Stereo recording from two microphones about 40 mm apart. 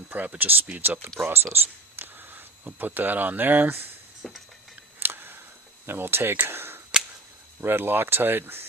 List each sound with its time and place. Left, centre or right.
0.1 s speech: right
1.2 s speech: right
1.5 s a sound: right
2.6 s speech: right
4.2 s a sound: centre
4.9 s camera: right
5.8 s speech: right
6.5 s cap gun: right
7.6 s speech: right